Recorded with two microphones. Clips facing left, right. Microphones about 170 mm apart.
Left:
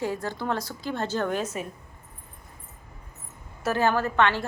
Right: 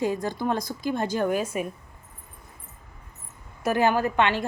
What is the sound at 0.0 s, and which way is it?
A woman's voice, 15° right (ahead or behind).